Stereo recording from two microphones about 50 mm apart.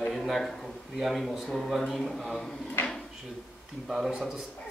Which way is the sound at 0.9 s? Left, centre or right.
Centre.